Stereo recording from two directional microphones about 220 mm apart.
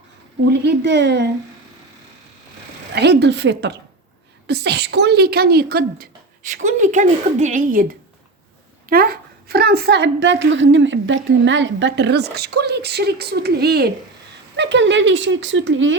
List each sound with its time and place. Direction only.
0.6 s a woman's voice: 50° right (ahead or behind)
2.9 s a woman's voice: 50° right (ahead or behind)
6.5 s a woman's voice: 35° right (ahead or behind); by 16.0 s 60° right (ahead or behind)